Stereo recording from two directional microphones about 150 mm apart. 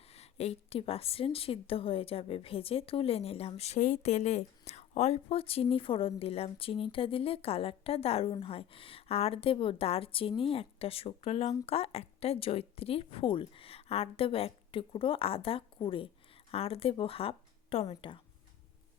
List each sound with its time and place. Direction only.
0.1 s a woman's voice: 45° left (ahead or behind)